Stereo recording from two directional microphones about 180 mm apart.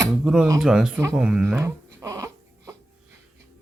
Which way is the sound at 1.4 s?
15° right (ahead or behind).